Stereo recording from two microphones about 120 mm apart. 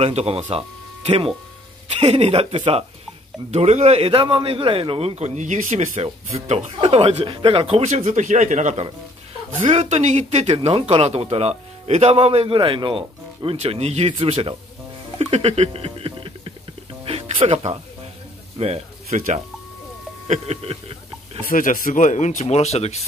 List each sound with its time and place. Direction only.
0.0 s speech: 60° right (ahead or behind)
3.5 s speech: 65° right (ahead or behind); by 6.0 s 80° right
6.4 s speech: 70° right (ahead or behind); by 8.8 s 90° right
9.6 s speech: 70° right (ahead or behind)
10.7 s speech: 55° right (ahead or behind)
15.1 s a sound: 60° right (ahead or behind)
17.0 s music: 50° right (ahead or behind)
18.6 s speech: 60° right (ahead or behind); by 19.4 s 80° right
20.2 s speech: 60° right (ahead or behind)
21.6 s speech: 90° left; by 23.0 s 60° left (ahead or behind)